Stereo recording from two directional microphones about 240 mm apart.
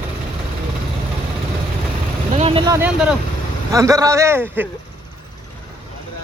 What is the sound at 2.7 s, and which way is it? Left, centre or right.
A man's voice, centre.